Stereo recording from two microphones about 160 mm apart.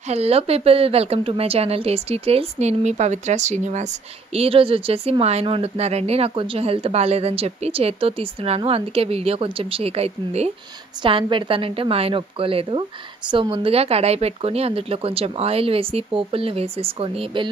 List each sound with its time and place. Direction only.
0.1 s a woman's voice: 40° right (ahead or behind)